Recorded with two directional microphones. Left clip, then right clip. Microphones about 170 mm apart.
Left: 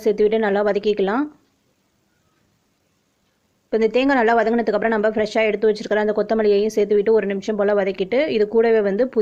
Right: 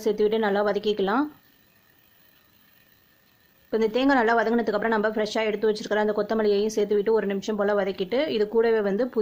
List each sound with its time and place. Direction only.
0.0 s a woman's voice: 15° left (ahead or behind)
3.7 s a woman's voice: 15° left (ahead or behind)